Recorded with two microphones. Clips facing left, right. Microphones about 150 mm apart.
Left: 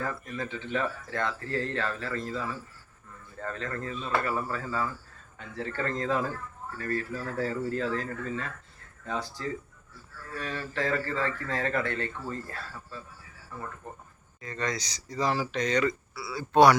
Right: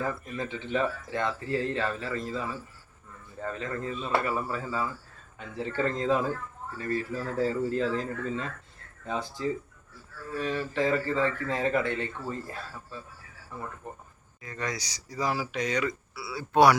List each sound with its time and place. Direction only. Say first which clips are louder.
0.3 s speech: right 2 dB; 15° right (ahead or behind)